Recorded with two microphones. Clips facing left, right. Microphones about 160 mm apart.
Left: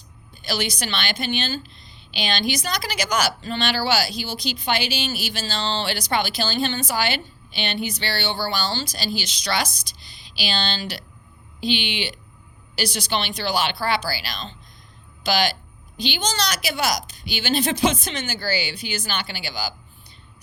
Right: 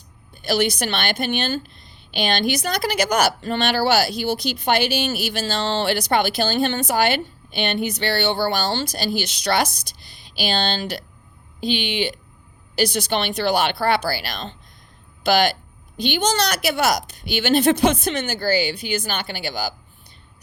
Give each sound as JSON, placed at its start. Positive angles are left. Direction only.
{"t": 0.4, "sound": "a woman's voice", "side_deg": -55}